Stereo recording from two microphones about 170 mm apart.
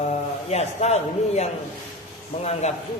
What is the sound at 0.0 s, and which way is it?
A man's voice, 40° left (ahead or behind).